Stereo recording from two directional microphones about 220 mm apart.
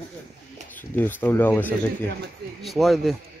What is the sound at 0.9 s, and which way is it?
Speech, 10° left (ahead or behind).